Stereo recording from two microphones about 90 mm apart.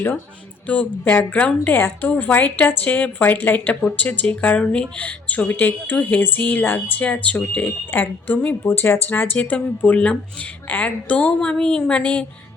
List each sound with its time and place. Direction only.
0.7 s a woman's voice: 15° left (ahead or behind)